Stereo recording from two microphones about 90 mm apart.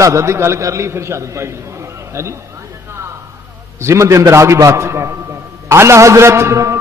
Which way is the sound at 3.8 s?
35° right (ahead or behind).